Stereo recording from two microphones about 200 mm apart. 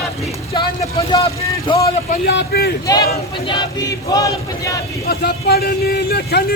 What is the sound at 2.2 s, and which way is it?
Speech, 55° left (ahead or behind).